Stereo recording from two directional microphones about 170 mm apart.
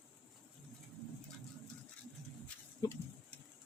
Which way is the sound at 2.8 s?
20° left (ahead or behind).